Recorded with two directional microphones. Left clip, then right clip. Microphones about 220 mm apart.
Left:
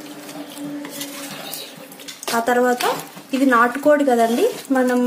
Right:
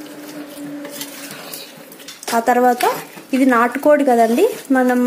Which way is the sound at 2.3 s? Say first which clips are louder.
Right 3 dB; 20° right (ahead or behind).